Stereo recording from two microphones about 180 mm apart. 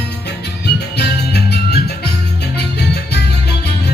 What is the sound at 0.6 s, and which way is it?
Music, 65° left (ahead or behind).